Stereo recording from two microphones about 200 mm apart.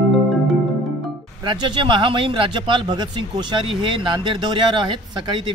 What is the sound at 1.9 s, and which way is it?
Speech, 25° right (ahead or behind).